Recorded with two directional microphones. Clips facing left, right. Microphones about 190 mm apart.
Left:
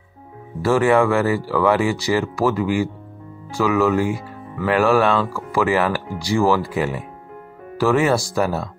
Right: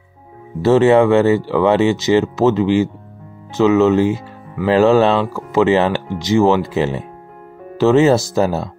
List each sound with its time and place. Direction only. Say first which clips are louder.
0.6 s speech: right 5 dB; 25° right (ahead or behind)